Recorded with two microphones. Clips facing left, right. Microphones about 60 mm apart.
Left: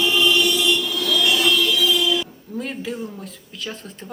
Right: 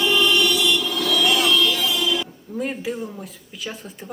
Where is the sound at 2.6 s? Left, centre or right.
Centre.